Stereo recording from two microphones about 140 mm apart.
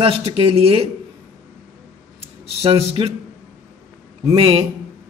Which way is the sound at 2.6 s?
40° right (ahead or behind).